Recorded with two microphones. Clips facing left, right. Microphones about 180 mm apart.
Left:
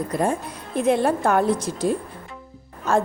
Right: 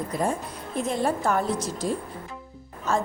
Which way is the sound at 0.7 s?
65° left (ahead or behind).